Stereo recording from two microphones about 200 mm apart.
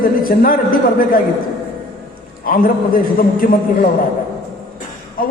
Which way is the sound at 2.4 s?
45° left (ahead or behind).